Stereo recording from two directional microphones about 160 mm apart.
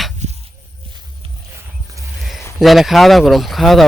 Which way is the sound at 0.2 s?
45° right (ahead or behind).